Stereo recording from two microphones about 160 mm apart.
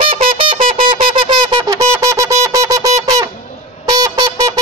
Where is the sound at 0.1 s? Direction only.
35° right (ahead or behind).